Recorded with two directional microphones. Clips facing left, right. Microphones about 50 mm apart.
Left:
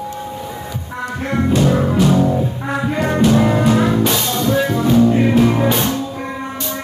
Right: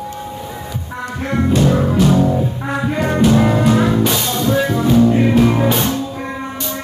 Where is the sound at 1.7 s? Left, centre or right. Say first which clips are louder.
Even; left.